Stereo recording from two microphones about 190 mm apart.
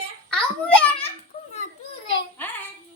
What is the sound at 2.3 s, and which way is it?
Child singing, 10° left (ahead or behind).